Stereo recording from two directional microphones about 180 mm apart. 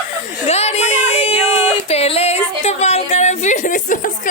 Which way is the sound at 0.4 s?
35° left (ahead or behind).